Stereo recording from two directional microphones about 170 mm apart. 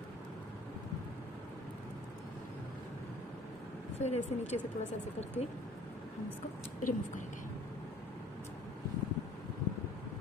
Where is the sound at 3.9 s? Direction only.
40° left (ahead or behind).